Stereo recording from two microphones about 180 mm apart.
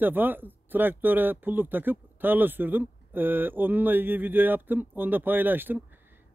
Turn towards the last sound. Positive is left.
turn(degrees=-10)  # may be behind; listen again after turning